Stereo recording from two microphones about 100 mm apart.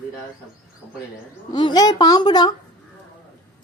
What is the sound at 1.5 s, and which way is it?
Speech, 45° left (ahead or behind).